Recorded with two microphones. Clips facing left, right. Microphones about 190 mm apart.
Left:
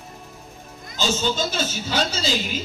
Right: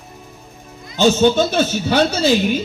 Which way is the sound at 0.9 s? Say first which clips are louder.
Right 11 dB; 65° right (ahead or behind).